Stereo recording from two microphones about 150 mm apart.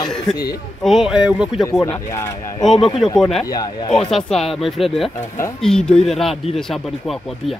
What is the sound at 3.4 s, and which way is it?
Speech, 25° left (ahead or behind).